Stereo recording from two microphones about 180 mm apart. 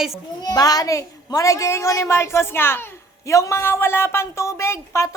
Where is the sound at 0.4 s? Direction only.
20° left (ahead or behind).